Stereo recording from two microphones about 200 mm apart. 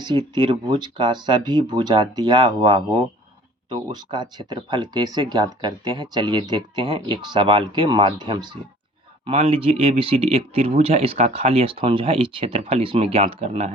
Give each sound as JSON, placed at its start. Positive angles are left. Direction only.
{"t": 0.0, "sound": "speech", "side_deg": -20}